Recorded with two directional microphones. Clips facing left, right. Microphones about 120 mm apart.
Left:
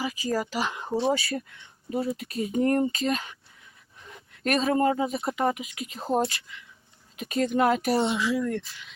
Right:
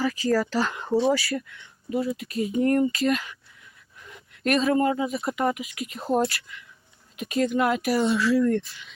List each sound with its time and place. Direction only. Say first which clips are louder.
0.0 s speech: right 5 dB; 15° left (ahead or behind)
1.4 s speech: right 2 dB; 35° left (ahead or behind)
7.2 s speech: right 1 dB; 35° left (ahead or behind); by 8.4 s 15° left (ahead or behind)
8.4 s speech: right 6 dB; 5° left (ahead or behind)